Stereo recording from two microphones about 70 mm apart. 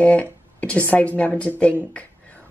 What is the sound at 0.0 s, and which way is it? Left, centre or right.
A woman's voice, centre.